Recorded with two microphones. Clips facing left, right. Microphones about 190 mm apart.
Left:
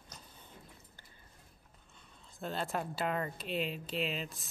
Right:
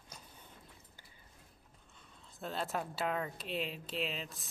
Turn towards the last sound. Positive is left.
turn(degrees=0)  # may be behind; listen again after turning